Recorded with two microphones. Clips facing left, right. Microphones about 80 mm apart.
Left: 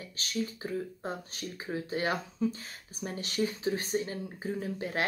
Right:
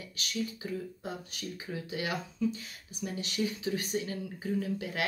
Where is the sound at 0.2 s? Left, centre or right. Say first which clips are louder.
Left 1 dB; left.